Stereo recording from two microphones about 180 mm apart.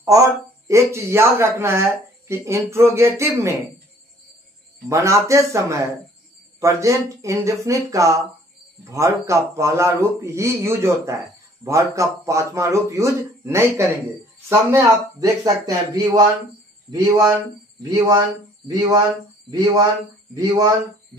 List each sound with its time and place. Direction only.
0.0 s speech: 15° right (ahead or behind)
4.8 s speech: 15° right (ahead or behind)